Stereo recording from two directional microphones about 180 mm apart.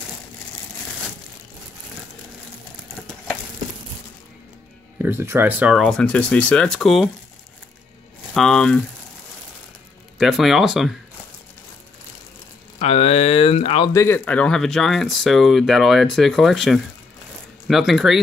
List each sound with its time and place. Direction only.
4.9 s speech: 10° right (ahead or behind)
8.4 s speech: 5° left (ahead or behind)
10.1 s speech: centre (ahead or behind)
12.7 s speech: 35° left (ahead or behind)
13.9 s speech: 15° left (ahead or behind)